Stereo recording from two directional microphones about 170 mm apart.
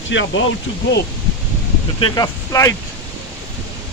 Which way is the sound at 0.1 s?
90° left.